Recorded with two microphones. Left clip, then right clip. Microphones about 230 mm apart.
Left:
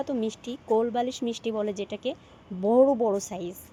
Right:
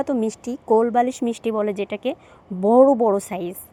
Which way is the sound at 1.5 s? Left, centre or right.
Right.